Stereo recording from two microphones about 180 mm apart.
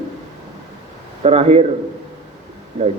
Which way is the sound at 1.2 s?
35° right (ahead or behind).